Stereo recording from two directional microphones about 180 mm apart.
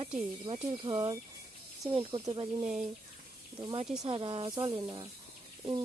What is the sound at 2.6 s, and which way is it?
Speech, 40° right (ahead or behind).